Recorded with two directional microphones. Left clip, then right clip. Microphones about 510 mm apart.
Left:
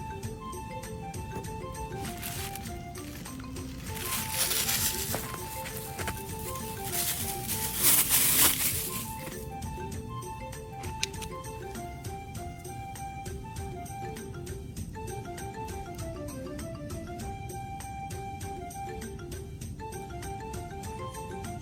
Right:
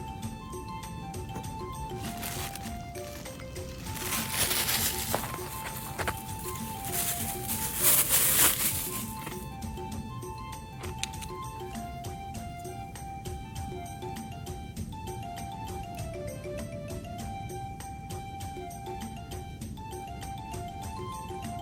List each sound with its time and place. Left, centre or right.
4.3 s music: centre
6.9 s music: centre